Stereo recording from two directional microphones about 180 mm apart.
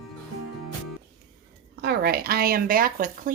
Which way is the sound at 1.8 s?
60° right (ahead or behind).